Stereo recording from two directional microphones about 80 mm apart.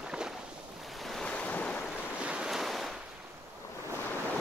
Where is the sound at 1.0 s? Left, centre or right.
Centre.